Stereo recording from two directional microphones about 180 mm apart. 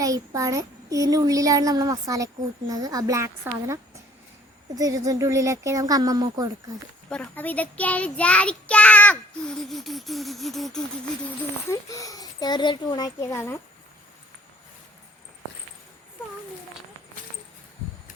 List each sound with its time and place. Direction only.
0.0 s a child's voice: 20° right (ahead or behind)
7.1 s a child's voice: 10° left (ahead or behind)
11.7 s a child's voice: 20° left (ahead or behind)